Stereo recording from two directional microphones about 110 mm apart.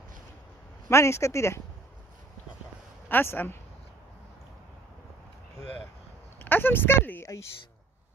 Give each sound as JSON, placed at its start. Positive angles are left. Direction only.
{"t": 0.8, "sound": "speech", "side_deg": 25}
{"t": 3.1, "sound": "speech", "side_deg": 20}
{"t": 6.4, "sound": "speech", "side_deg": 20}